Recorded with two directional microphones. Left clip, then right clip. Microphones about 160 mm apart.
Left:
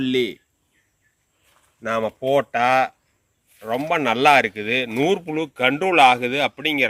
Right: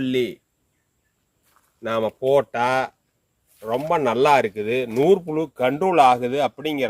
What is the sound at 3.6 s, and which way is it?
Speech, 90° right.